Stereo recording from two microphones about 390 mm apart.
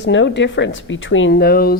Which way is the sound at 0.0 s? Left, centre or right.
Left.